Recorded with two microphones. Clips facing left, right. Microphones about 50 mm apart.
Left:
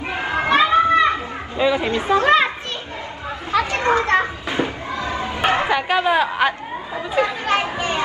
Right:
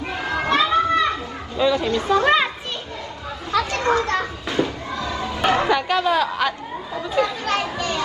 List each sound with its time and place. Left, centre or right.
0.0 s children playing: left
2.2 s a child's voice: centre
3.5 s children playing: left